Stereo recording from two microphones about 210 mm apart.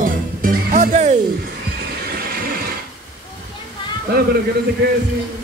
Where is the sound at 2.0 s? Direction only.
45° right (ahead or behind).